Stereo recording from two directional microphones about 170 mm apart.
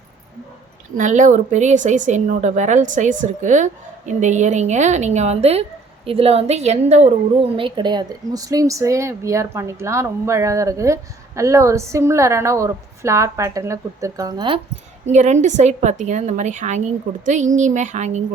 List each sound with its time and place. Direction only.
0.9 s a woman's voice: 45° right (ahead or behind); by 14.6 s 25° right (ahead or behind)
15.0 s a woman's voice: 45° right (ahead or behind)